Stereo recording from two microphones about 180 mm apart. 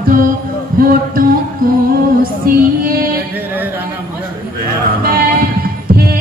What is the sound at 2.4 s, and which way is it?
Music, 55° right (ahead or behind).